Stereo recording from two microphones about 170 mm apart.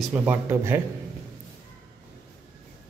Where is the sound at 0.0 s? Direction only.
10° right (ahead or behind).